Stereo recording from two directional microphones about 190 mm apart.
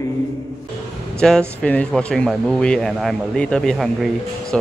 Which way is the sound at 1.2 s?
5° left (ahead or behind).